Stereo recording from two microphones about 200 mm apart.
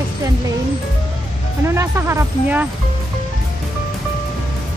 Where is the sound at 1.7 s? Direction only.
15° right (ahead or behind).